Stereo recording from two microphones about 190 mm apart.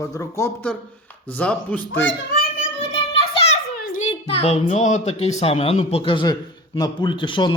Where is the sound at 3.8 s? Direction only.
45° left (ahead or behind).